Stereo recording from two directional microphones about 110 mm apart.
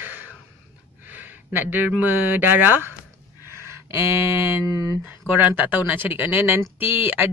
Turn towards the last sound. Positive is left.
turn(degrees=-15)  # may be behind; listen again after turning